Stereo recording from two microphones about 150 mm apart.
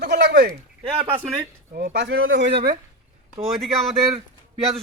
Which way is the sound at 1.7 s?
80° right.